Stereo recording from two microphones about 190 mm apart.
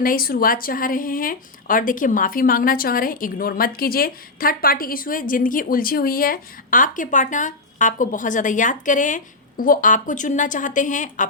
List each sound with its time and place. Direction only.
0.0 s speech: 50° left (ahead or behind)